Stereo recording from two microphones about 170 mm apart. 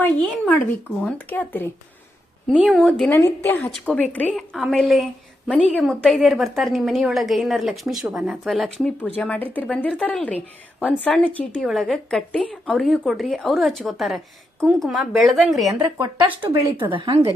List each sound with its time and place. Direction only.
0.0 s a woman's voice: 10° left (ahead or behind)
2.6 s a woman's voice: centre (ahead or behind)
3.1 s a woman's voice: 15° left (ahead or behind)
4.3 s a woman's voice: centre (ahead or behind)
16.2 s speech: 30° right (ahead or behind)